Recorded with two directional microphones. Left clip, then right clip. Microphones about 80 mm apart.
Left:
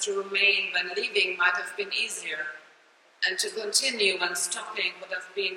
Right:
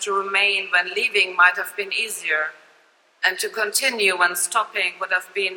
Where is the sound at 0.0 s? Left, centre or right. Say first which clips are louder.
Right 5 dB; right.